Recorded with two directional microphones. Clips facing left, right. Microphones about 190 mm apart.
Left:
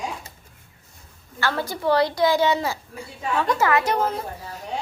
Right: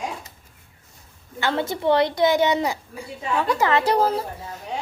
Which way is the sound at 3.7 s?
35° right (ahead or behind).